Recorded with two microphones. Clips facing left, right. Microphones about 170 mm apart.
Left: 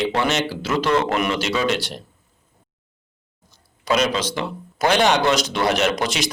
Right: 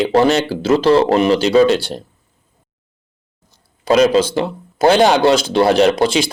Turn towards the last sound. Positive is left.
turn(degrees=-30)  # may be behind; listen again after turning